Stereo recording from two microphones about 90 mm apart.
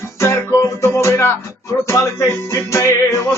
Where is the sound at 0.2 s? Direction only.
35° left (ahead or behind).